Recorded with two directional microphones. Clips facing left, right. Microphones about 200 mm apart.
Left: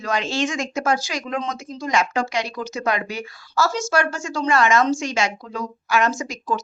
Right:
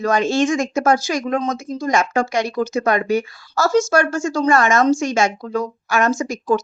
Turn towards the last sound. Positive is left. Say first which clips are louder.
# right 6 dB
turn(degrees=-45)  # may be behind; listen again after turning